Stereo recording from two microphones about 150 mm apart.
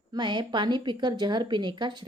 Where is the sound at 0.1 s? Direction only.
30° right (ahead or behind).